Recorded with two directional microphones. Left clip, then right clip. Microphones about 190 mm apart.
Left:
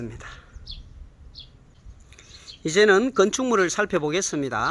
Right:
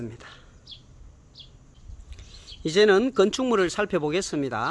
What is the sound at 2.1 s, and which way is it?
Speech, 5° right (ahead or behind).